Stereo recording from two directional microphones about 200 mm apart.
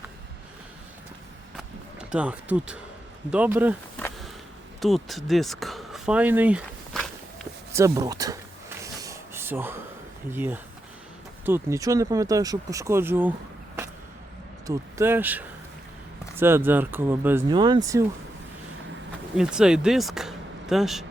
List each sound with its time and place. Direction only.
1.5 s run: 5° right (ahead or behind)
3.2 s speech: 5° right (ahead or behind)
4.8 s speech: centre (ahead or behind)
6.9 s walk: centre (ahead or behind)
7.7 s speech: 15° right (ahead or behind)
8.8 s a sound: 15° right (ahead or behind)
10.3 s speech: 10° right (ahead or behind)
14.7 s speech: 15° right (ahead or behind)
17.5 s speech: 20° right (ahead or behind)
19.4 s speech: 5° right (ahead or behind)